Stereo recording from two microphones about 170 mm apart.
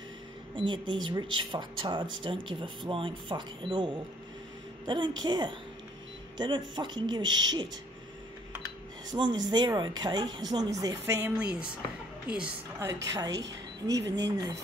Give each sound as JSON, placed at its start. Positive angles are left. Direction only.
{"t": 0.6, "sound": "a woman's voice", "side_deg": -30}
{"t": 9.1, "sound": "speech", "side_deg": -25}
{"t": 11.2, "sound": "a woman's voice", "side_deg": -5}
{"t": 12.7, "sound": "a woman's voice", "side_deg": -20}
{"t": 13.9, "sound": "speech", "side_deg": -90}